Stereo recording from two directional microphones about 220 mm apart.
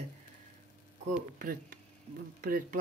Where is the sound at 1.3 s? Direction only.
40° right (ahead or behind).